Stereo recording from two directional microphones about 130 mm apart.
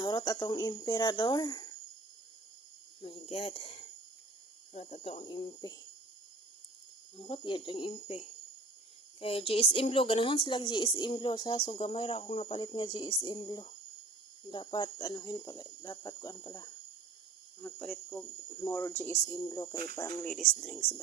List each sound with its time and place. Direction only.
0.0 s speech: 30° left (ahead or behind)
3.0 s speech: 50° left (ahead or behind)
4.7 s speech: 60° left (ahead or behind); by 5.8 s 30° left (ahead or behind)
7.2 s speech: 40° left (ahead or behind); by 16.7 s 25° left (ahead or behind)
17.6 s speech: 10° left (ahead or behind); by 20.1 s 30° left (ahead or behind)
20.2 s speech: 5° left (ahead or behind)